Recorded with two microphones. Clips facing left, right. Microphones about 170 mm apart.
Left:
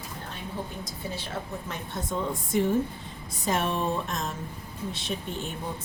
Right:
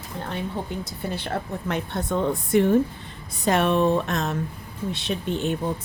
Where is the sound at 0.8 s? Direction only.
60° right (ahead or behind).